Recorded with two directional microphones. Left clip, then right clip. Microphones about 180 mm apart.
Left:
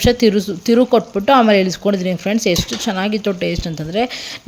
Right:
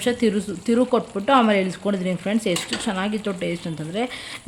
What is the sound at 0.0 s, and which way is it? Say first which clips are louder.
Speech: left 8 dB; 25° left (ahead or behind).